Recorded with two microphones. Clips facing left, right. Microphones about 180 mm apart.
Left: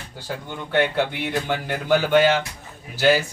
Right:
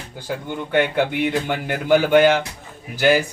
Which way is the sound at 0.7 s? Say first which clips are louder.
Right 2 dB; 10° right (ahead or behind).